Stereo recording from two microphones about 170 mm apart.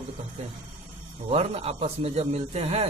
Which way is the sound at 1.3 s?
35° right (ahead or behind).